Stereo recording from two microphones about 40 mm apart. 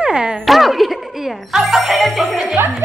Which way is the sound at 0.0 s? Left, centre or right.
Centre.